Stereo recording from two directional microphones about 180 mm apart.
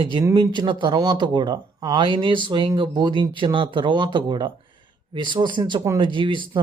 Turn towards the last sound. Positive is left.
turn(degrees=-25)  # may be behind; listen again after turning